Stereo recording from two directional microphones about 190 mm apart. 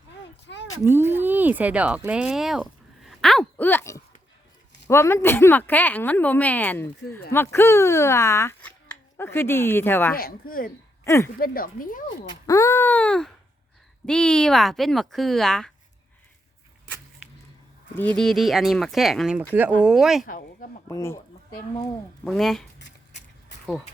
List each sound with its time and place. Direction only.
0.4 s a sound: 65° left (ahead or behind)
0.9 s speech: 10° right (ahead or behind); by 10.2 s 10° left (ahead or behind)
10.2 s speech: 50° left (ahead or behind)
11.0 s speech: 15° left (ahead or behind)
11.3 s speech: 50° left (ahead or behind)
12.5 s speech: 15° left (ahead or behind)
17.9 s speech: 10° left (ahead or behind)
20.2 s speech: 45° left (ahead or behind)
20.8 s speech: 15° left (ahead or behind)
22.2 s speech: centre (ahead or behind)